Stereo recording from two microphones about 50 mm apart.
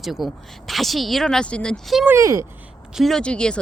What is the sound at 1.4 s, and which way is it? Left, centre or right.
Speech, centre.